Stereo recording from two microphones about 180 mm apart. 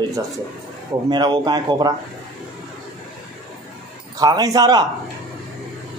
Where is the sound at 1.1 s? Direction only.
25° right (ahead or behind).